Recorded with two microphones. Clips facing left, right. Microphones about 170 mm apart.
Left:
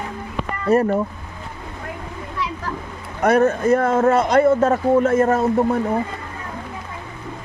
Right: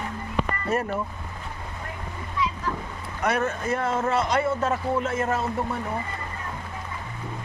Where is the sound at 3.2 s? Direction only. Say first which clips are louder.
Left 10 dB; 40° left (ahead or behind).